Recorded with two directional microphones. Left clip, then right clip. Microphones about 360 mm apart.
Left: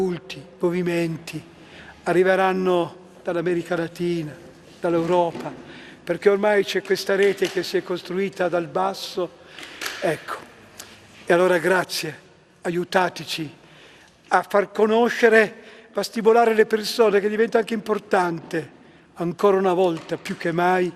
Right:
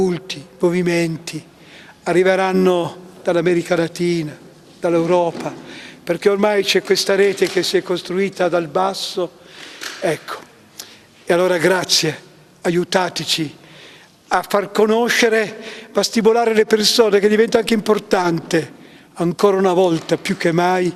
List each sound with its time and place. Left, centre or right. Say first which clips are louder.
0.0 s a man's voice: right 6 dB; right
10.0 s a sound: right 4 dB; right
11.3 s a man's voice: right 3 dB; right